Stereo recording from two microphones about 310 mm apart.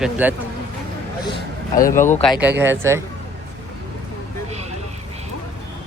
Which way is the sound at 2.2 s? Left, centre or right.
Centre.